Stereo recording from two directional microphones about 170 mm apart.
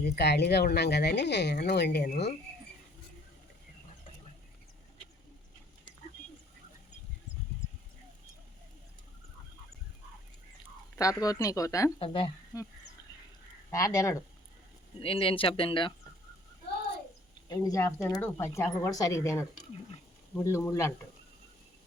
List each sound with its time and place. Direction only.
0.0 s speech: 75° left (ahead or behind)
10.9 s speech: 20° left (ahead or behind)
11.9 s speech: 30° left (ahead or behind)
13.7 s speech: 20° left (ahead or behind)
15.0 s speech: 30° left (ahead or behind)
17.5 s speech: 20° left (ahead or behind)